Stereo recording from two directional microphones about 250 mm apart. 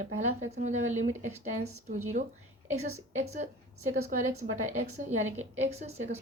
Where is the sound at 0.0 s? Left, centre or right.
Right.